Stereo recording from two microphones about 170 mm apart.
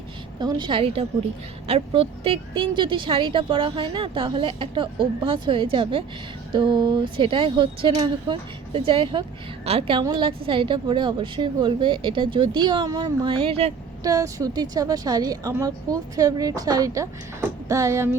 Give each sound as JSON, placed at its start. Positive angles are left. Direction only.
{"t": 0.3, "sound": "a woman's voice", "side_deg": -25}
{"t": 14.0, "sound": "a woman's voice", "side_deg": -20}
{"t": 17.7, "sound": "a sound", "side_deg": -20}